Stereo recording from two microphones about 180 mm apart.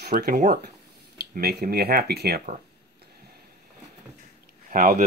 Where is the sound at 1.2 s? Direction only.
65° right (ahead or behind).